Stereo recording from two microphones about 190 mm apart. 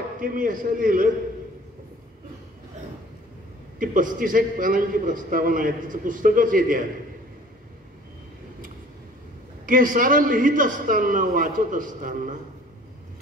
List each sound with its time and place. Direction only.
0.2 s a man's voice: 45° right (ahead or behind)
3.8 s a man's voice: 45° right (ahead or behind)
9.7 s a man's voice: 45° right (ahead or behind)